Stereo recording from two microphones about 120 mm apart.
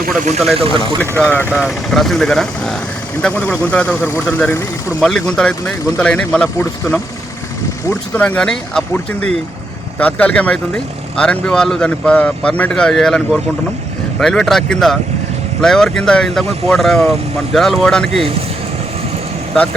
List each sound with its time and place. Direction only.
0.5 s speech: 50° right (ahead or behind)
1.1 s speech: 15° left (ahead or behind)
1.5 s speech: centre (ahead or behind)
4.9 s a man's voice: 5° left (ahead or behind)
10.0 s speech: 10° left (ahead or behind)